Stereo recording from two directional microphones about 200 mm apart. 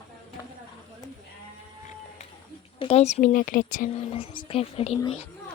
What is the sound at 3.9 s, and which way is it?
Speech, 30° left (ahead or behind).